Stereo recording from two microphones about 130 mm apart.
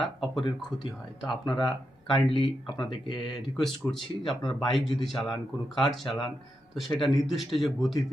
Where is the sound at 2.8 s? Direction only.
40° left (ahead or behind).